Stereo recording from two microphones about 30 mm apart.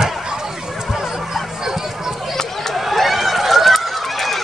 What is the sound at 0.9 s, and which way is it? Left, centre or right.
Music, centre.